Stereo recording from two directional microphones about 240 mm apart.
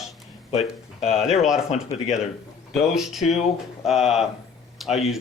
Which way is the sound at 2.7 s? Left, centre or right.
Centre.